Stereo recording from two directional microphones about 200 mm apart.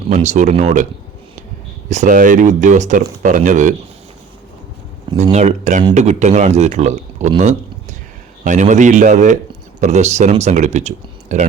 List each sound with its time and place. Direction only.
0.1 s speech: 35° right (ahead or behind)
1.9 s speech: 40° right (ahead or behind)
5.1 s a man's voice: 35° right (ahead or behind)